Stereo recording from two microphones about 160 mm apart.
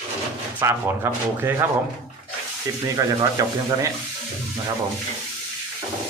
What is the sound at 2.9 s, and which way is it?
Speech, 20° right (ahead or behind).